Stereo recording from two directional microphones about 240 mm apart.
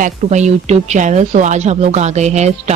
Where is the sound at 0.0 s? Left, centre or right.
Right.